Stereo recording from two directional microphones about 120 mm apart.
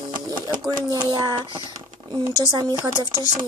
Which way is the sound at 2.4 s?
30° right (ahead or behind).